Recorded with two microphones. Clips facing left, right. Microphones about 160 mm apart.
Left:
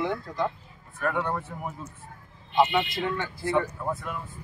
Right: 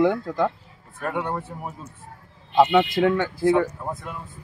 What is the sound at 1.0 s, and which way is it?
Speech, 15° right (ahead or behind).